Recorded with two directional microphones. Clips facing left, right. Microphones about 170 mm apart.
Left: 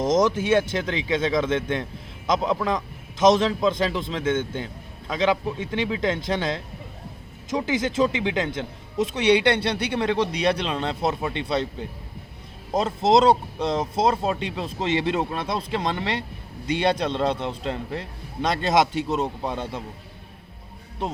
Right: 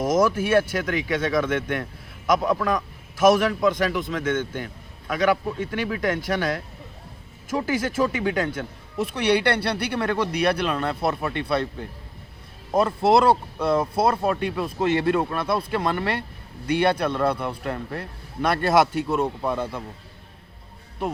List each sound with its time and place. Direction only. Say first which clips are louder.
0.0 s a man's voice: even; 20° left (ahead or behind)
13.0 s a man's voice: left 2 dB; 20° left (ahead or behind)